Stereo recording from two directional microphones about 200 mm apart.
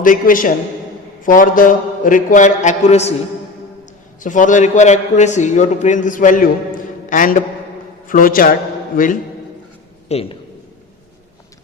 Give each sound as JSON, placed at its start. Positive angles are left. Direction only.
{"t": 0.0, "sound": "a man's voice", "side_deg": 45}
{"t": 4.2, "sound": "a man's voice", "side_deg": 40}
{"t": 10.1, "sound": "a man's voice", "side_deg": 30}